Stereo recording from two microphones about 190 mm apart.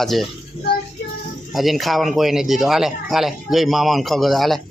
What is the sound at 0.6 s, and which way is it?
Child singing, 30° left (ahead or behind).